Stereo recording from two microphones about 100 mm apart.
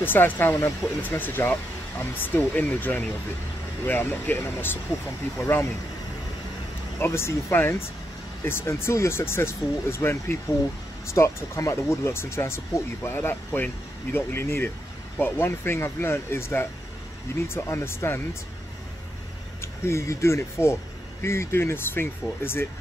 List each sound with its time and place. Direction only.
0.0 s speech: 20° left (ahead or behind)
7.0 s speech: 25° left (ahead or behind)
11.1 s speech: 30° left (ahead or behind)
19.6 s speech: 25° left (ahead or behind)